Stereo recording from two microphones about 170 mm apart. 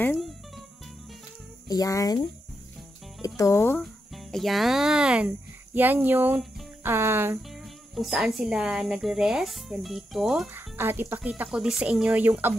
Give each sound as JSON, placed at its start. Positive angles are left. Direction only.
{"t": 1.7, "sound": "speech", "side_deg": 20}
{"t": 3.8, "sound": "speech", "side_deg": 0}
{"t": 7.9, "sound": "speech", "side_deg": 0}